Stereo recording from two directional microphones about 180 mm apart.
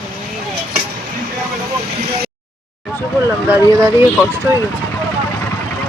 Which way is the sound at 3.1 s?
15° right (ahead or behind).